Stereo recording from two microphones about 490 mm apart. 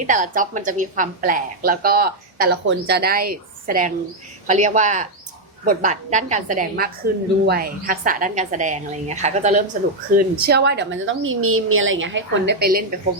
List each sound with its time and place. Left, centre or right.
0.1 s a woman's voice: centre